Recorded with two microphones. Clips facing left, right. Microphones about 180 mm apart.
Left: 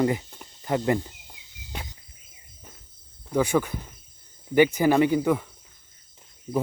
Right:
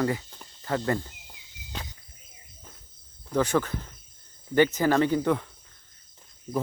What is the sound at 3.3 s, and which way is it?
Speech, 10° left (ahead or behind).